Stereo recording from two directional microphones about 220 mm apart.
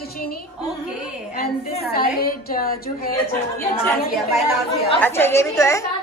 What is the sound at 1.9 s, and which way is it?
A woman's voice, 45° left (ahead or behind).